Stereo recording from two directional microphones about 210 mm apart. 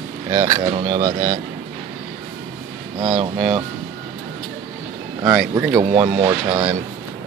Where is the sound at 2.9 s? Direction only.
25° right (ahead or behind).